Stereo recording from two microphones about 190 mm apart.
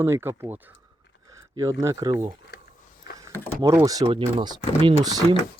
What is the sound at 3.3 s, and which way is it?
Vehicle, 10° left (ahead or behind).